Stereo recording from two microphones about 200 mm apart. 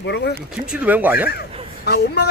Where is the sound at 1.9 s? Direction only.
55° left (ahead or behind).